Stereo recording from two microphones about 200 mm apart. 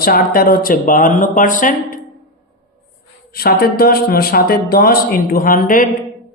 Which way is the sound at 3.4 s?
50° left (ahead or behind).